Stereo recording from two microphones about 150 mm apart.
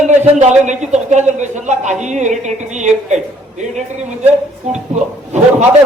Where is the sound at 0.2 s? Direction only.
50° right (ahead or behind).